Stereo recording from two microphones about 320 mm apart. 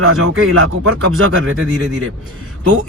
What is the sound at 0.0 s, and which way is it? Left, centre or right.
Speech, right.